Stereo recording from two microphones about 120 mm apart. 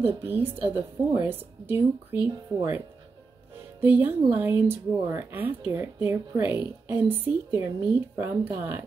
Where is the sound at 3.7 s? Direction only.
15° right (ahead or behind).